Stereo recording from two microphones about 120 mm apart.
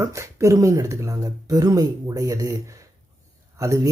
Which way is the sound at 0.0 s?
25° right (ahead or behind).